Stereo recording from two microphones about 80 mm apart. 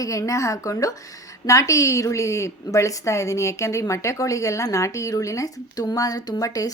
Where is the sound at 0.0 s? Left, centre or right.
Left.